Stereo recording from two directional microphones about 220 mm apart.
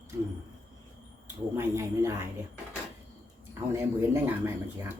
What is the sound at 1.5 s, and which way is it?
Speech, 10° right (ahead or behind).